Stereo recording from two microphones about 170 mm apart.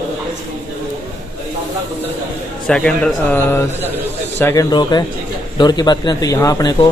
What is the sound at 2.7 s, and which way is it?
A man's voice, 5° left (ahead or behind).